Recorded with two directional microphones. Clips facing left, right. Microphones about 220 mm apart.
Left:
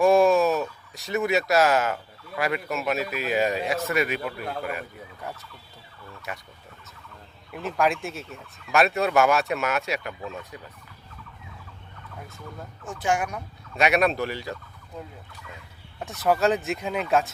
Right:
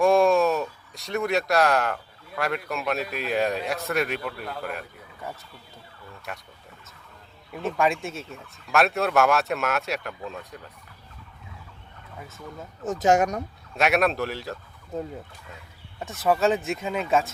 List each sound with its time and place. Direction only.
0.0 s speech: centre (ahead or behind)
7.5 s speech: centre (ahead or behind)
12.8 s speech: 40° right (ahead or behind)
13.7 s speech: centre (ahead or behind)
16.0 s speech: centre (ahead or behind)